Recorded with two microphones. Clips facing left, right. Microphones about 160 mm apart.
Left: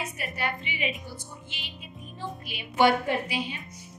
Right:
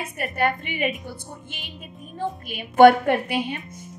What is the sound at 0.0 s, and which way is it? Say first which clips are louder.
A woman's voice: right 8 dB; 50° right (ahead or behind).